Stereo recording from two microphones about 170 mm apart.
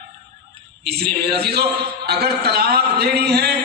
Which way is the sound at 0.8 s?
70° right (ahead or behind).